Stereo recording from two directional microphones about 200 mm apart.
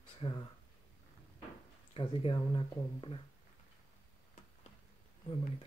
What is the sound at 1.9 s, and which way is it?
Speech, 25° left (ahead or behind).